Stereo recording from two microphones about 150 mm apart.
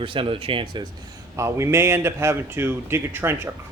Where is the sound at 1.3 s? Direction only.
20° right (ahead or behind).